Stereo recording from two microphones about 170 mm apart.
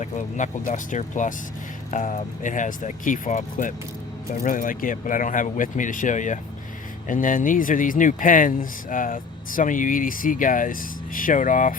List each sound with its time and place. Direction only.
0.0 s speech: 45° left (ahead or behind)